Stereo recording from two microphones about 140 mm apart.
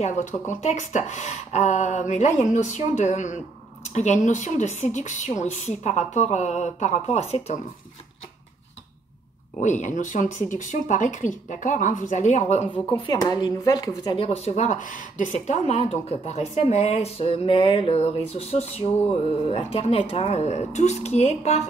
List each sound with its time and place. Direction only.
0.0 s speech: 55° left (ahead or behind)
9.6 s speech: 60° left (ahead or behind)
12.9 s speech: 30° left (ahead or behind)
14.1 s a woman's voice: 45° left (ahead or behind)